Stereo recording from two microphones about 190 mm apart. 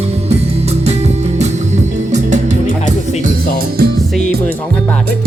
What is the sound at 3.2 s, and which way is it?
Music, 50° right (ahead or behind).